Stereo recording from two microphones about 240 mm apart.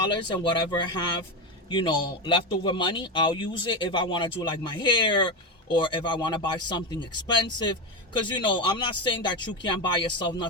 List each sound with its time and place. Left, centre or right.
0.0 s speech: centre